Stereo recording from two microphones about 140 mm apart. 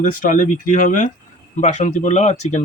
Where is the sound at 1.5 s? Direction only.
60° left (ahead or behind).